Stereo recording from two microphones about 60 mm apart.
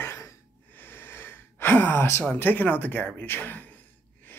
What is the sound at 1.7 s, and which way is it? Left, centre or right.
Speech, left.